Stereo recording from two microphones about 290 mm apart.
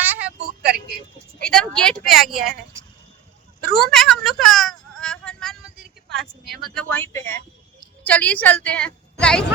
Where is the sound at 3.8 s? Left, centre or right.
Centre.